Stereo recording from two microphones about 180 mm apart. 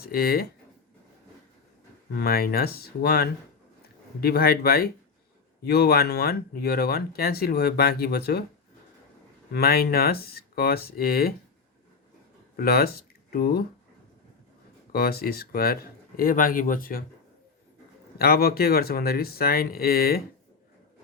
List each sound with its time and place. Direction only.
0.1 s speech: 60° left (ahead or behind)
2.1 s speech: 60° left (ahead or behind)
9.5 s speech: 60° left (ahead or behind)
12.5 s speech: 55° left (ahead or behind)
14.9 s speech: 55° left (ahead or behind)
18.2 s speech: 60° left (ahead or behind)